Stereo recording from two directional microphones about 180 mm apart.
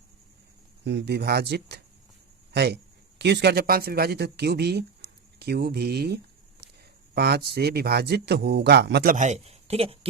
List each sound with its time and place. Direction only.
0.9 s speech: 70° right (ahead or behind)
7.2 s speech: 65° right (ahead or behind)
9.1 s speech: 40° right (ahead or behind)